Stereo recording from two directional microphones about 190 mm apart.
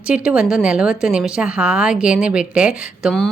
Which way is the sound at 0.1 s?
5° right (ahead or behind).